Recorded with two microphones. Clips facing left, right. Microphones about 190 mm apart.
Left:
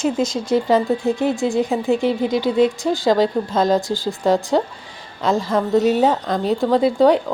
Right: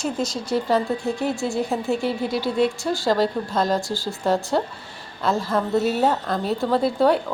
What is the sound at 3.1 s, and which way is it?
Speech, centre (ahead or behind).